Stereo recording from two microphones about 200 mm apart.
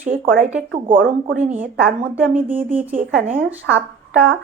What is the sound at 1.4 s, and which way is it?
Speech, 10° right (ahead or behind).